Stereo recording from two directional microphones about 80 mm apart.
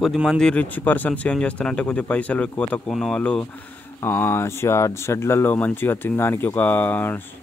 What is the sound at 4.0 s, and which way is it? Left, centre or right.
Speech, left.